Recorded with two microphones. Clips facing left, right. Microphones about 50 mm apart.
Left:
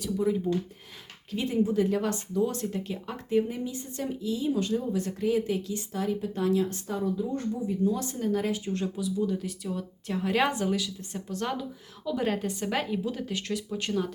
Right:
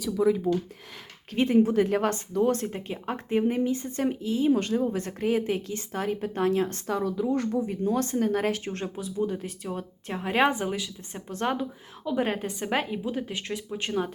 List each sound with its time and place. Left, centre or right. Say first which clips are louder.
1.3 s a woman's voice: right 5 dB; right
2.6 s a woman's voice: even; right
7.7 s a woman's voice: right 2 dB; right
8.7 s a woman's voice: left 2 dB; right